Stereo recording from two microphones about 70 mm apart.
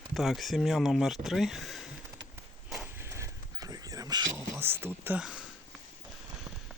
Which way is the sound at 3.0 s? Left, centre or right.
Right.